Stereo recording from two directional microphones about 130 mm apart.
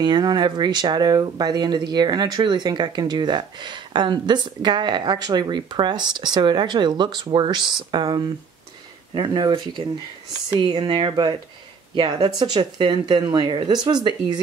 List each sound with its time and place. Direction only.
0.0 s speech: 35° right (ahead or behind)